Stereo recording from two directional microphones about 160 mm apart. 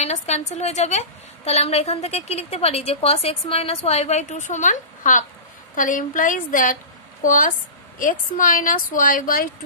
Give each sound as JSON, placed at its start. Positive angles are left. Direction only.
{"t": 0.0, "sound": "a woman's voice", "side_deg": 45}